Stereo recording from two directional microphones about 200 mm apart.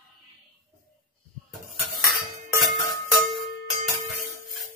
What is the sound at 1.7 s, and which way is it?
Cutlery, centre (ahead or behind).